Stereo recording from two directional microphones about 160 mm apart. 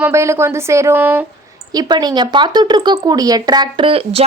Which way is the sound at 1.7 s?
25° right (ahead or behind).